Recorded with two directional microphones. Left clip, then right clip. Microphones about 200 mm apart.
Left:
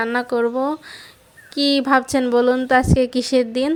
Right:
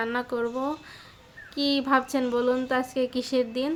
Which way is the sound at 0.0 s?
35° left (ahead or behind).